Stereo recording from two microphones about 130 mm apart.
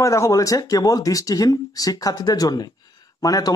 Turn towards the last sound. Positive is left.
turn(degrees=30)  # may be behind; listen again after turning